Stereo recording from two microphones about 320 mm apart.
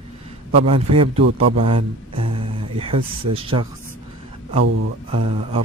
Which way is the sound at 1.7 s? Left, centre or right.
Centre.